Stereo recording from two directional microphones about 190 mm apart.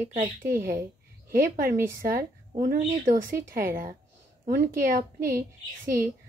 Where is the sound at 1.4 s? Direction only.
45° right (ahead or behind).